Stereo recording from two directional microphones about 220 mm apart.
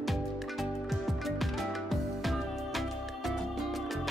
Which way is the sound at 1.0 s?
Centre (ahead or behind).